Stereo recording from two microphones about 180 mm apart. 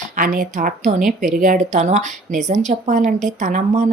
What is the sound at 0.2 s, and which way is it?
Speech, 45° right (ahead or behind).